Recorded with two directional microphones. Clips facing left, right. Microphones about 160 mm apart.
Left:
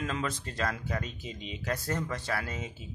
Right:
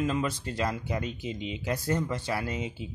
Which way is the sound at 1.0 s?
60° right (ahead or behind).